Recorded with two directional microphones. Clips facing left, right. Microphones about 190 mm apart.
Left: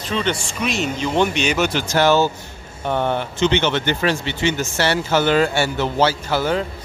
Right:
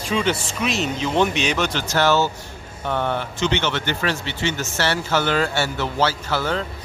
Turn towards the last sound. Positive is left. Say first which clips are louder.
# left 3 dB
turn(degrees=15)  # may be behind; listen again after turning